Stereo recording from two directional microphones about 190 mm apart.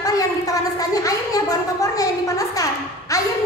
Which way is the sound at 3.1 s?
15° left (ahead or behind).